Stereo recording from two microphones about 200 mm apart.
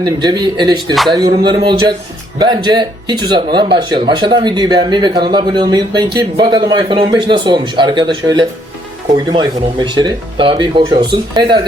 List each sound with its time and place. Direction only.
0.0 s speech: 20° right (ahead or behind)